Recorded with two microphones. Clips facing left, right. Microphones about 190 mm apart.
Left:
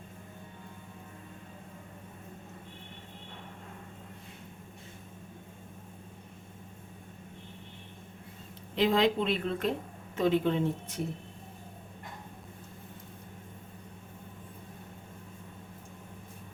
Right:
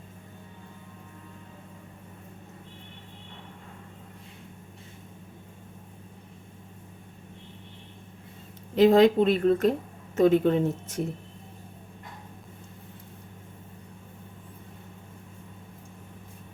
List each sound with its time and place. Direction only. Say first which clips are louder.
8.7 s speech: right 8 dB; 45° right (ahead or behind)